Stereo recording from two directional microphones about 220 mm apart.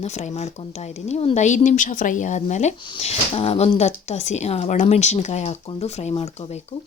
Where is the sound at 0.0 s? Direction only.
30° left (ahead or behind).